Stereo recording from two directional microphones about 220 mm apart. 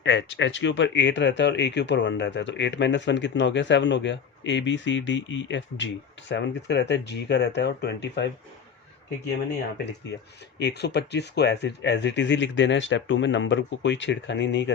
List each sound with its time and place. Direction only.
0.0 s speech: 55° left (ahead or behind)
10.6 s speech: 50° left (ahead or behind)